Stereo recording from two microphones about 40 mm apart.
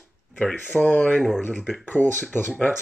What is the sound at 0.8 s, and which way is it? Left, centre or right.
Speech, left.